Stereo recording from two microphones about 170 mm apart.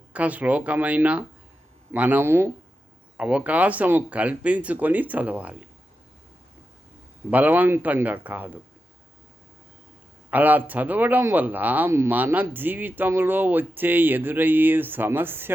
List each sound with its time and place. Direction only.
0.1 s speech: 10° right (ahead or behind)
7.3 s speech: 10° right (ahead or behind)
10.3 s speech: 10° right (ahead or behind)